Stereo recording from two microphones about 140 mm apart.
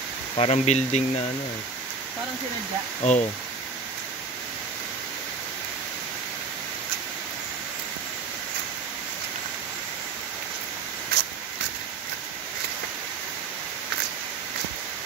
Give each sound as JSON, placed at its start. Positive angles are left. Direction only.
{"t": 0.4, "sound": "speech", "side_deg": 50}
{"t": 3.0, "sound": "speech", "side_deg": 55}